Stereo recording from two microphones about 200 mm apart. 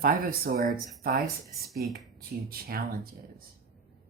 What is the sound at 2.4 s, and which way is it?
Speech, 50° right (ahead or behind).